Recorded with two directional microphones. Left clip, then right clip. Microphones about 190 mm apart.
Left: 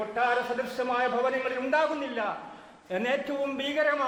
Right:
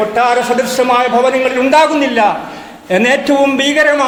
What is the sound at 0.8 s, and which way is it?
A man's voice, 30° right (ahead or behind).